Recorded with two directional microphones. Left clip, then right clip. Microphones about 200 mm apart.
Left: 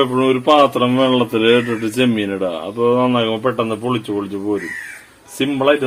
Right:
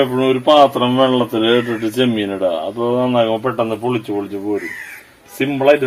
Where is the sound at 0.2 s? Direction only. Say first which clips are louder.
Right 2 dB; 30° left (ahead or behind).